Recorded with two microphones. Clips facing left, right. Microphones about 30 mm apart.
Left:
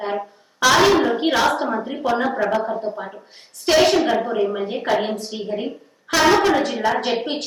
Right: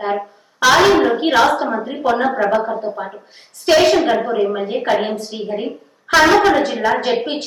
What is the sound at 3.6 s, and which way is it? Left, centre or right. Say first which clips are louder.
Speech: right 3 dB; centre.